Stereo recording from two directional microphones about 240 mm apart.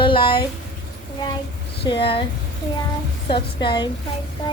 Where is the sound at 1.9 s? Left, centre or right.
Left.